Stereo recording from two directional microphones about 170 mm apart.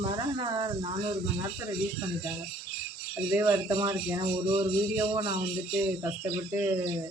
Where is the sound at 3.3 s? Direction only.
15° right (ahead or behind).